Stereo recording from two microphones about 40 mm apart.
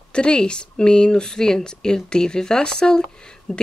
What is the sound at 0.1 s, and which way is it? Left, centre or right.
Speech, left.